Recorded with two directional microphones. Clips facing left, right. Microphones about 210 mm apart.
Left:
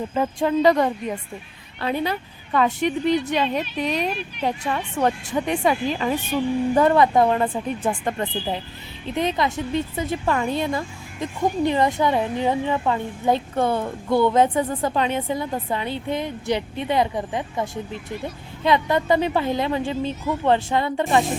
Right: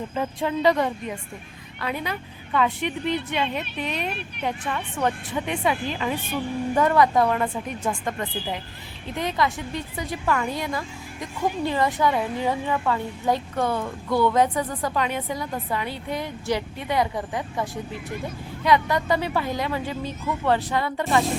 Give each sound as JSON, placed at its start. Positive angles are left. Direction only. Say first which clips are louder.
{"t": 0.1, "sound": "speech", "louder": "left 6 dB", "side_deg": 40}
{"t": 1.8, "sound": "a woman's voice", "louder": "left 5 dB", "side_deg": 30}
{"t": 6.7, "sound": "speech", "louder": "left 2 dB", "side_deg": 30}